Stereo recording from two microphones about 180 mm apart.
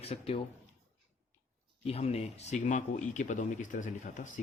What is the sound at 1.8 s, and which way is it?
Speech, 35° left (ahead or behind).